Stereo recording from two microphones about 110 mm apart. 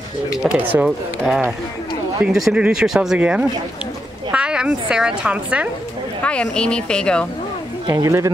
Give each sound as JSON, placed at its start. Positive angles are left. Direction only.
{"t": 0.6, "sound": "speech", "side_deg": -15}
{"t": 0.8, "sound": "a woman's voice", "side_deg": 0}
{"t": 6.2, "sound": "speech", "side_deg": 10}
{"t": 7.9, "sound": "speech", "side_deg": -30}